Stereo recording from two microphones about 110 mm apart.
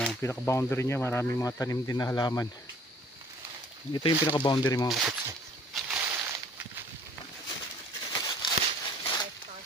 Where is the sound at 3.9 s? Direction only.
50° left (ahead or behind).